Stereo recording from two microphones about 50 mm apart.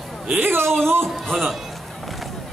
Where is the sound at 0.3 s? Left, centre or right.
Right.